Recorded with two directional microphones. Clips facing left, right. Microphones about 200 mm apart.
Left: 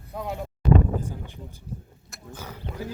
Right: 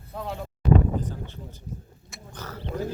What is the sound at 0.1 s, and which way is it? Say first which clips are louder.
Speech: left 1 dB; 15° left (ahead or behind).